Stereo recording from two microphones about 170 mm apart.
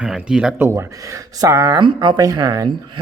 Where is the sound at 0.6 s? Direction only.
15° right (ahead or behind).